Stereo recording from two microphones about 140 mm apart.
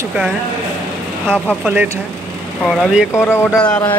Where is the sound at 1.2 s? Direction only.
10° left (ahead or behind).